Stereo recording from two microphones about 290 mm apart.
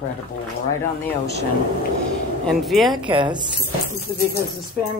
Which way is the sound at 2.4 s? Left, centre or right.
Centre.